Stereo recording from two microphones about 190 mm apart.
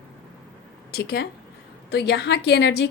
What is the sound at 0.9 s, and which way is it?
A woman's voice, 55° left (ahead or behind).